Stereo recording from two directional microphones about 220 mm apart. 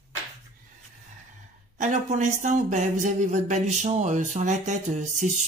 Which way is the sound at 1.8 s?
35° right (ahead or behind).